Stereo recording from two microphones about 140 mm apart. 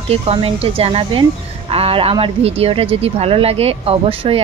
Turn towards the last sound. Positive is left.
turn(degrees=-40)  # may be behind; listen again after turning